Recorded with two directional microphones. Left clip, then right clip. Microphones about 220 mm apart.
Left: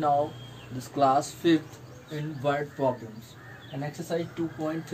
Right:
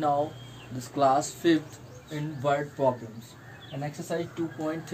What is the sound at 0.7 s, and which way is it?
Speech, 15° right (ahead or behind).